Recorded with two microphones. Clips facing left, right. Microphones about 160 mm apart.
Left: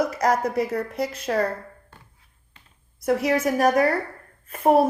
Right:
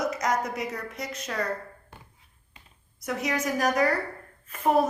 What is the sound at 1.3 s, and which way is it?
Speech, 50° left (ahead or behind).